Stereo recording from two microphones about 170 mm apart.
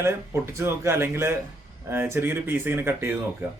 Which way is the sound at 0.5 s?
15° right (ahead or behind).